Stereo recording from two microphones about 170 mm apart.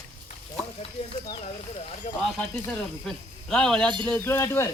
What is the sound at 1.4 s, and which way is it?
Speech, 40° left (ahead or behind).